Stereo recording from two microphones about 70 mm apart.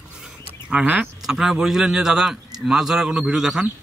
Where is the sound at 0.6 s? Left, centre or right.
Centre.